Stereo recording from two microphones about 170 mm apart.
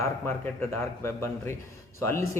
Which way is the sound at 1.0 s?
15° left (ahead or behind).